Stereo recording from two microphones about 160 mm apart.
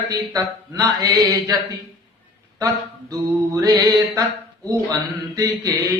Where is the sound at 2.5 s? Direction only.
20° right (ahead or behind).